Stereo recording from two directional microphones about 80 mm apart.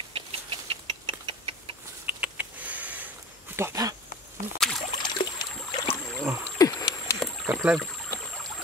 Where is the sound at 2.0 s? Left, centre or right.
Centre.